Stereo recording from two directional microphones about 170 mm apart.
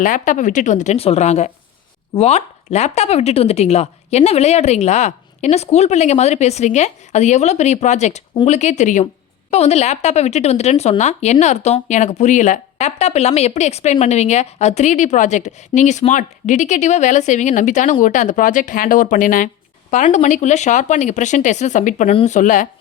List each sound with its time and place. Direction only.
0.0 s speech: 50° left (ahead or behind)